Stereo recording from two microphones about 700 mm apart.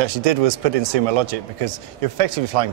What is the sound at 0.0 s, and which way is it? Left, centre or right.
Speech, right.